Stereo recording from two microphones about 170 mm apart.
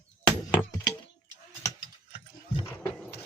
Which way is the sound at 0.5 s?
20° left (ahead or behind).